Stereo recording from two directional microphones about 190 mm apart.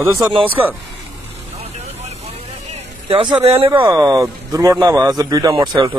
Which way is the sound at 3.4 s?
30° right (ahead or behind).